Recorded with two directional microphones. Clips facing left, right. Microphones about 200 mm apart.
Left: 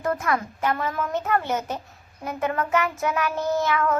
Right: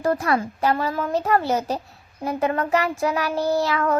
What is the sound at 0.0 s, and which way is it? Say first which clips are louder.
A child's voice: right 4 dB; 35° right (ahead or behind).